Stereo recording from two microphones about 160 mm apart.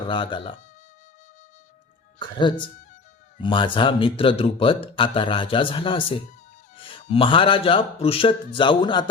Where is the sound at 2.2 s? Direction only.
30° left (ahead or behind).